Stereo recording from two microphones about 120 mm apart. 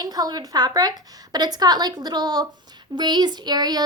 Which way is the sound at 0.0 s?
35° right (ahead or behind).